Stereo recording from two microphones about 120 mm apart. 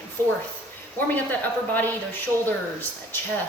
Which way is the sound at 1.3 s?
15° left (ahead or behind).